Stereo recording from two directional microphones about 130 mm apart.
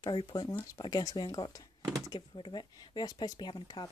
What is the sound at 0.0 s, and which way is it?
Speech, 35° left (ahead or behind).